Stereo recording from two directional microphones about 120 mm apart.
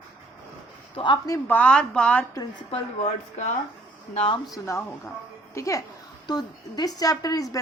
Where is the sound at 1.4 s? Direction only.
10° left (ahead or behind).